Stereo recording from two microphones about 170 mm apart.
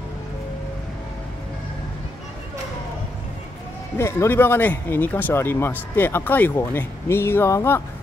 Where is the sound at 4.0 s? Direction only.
15° left (ahead or behind).